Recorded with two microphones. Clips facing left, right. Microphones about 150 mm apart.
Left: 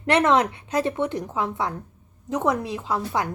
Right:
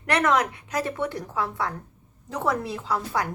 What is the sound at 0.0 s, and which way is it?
A woman's voice, 25° left (ahead or behind).